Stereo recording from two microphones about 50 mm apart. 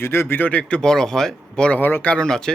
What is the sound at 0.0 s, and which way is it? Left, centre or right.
Speech, left.